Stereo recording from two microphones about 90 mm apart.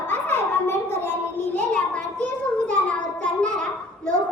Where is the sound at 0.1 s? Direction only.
25° left (ahead or behind).